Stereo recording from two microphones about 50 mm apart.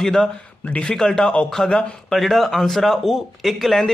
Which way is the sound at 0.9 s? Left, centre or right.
Centre.